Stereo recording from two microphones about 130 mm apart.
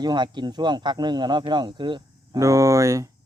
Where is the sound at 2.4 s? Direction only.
25° right (ahead or behind).